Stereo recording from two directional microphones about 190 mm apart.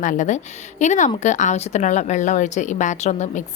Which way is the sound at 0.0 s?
40° left (ahead or behind).